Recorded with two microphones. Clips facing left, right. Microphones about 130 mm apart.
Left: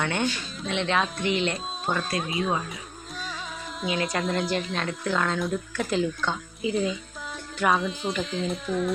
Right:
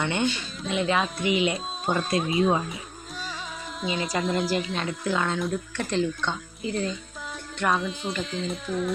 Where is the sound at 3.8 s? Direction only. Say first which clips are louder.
Even; centre (ahead or behind).